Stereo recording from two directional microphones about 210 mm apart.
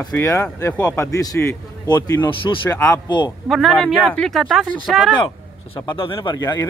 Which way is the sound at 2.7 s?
15° left (ahead or behind).